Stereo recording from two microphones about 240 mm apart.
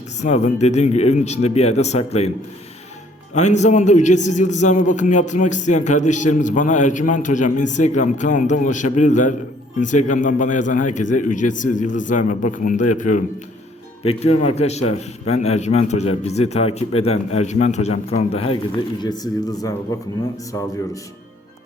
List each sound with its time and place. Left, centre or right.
0.2 s a man's voice: left
3.3 s a man's voice: left